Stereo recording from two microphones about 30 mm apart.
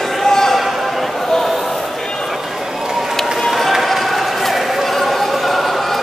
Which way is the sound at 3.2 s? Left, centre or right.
Centre.